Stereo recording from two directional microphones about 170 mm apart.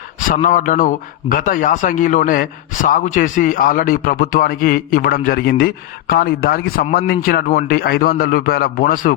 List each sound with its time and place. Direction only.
0.4 s a man's voice: 50° left (ahead or behind)